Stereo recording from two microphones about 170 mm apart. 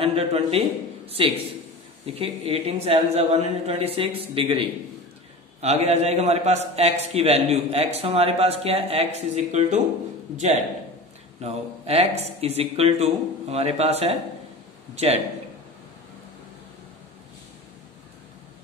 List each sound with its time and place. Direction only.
0.0 s a man's voice: 35° right (ahead or behind)